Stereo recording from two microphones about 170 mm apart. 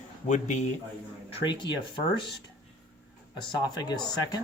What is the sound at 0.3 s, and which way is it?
Speech, 45° left (ahead or behind).